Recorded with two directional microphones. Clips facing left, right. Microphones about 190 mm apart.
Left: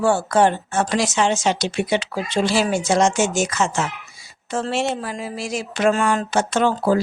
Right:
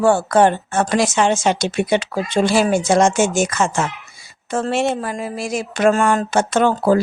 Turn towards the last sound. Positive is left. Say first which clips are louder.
# right 3 dB
turn(degrees=-50)  # may be behind; listen again after turning